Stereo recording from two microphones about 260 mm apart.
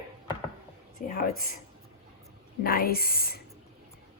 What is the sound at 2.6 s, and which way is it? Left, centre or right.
Speech, left.